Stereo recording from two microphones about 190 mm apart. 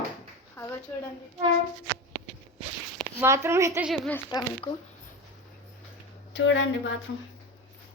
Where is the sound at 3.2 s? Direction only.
15° right (ahead or behind).